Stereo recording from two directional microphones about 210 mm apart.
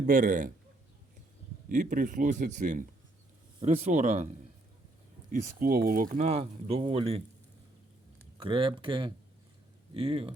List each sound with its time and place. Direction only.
0.0 s speech: 40° right (ahead or behind)
1.7 s speech: 35° right (ahead or behind)
5.3 s speech: 45° right (ahead or behind); by 7.2 s 25° right (ahead or behind)
8.4 s speech: 25° right (ahead or behind)